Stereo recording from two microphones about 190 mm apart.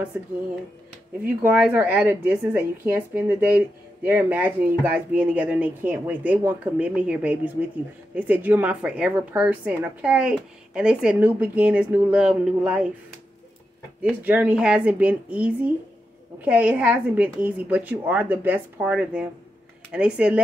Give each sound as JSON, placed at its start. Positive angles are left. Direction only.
{"t": 1.2, "sound": "a woman's voice", "side_deg": -10}
{"t": 14.2, "sound": "a woman's voice", "side_deg": -10}